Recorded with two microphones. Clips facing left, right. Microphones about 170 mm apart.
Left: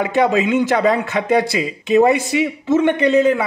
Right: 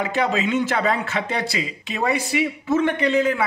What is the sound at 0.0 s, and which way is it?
A man's voice, 15° left (ahead or behind).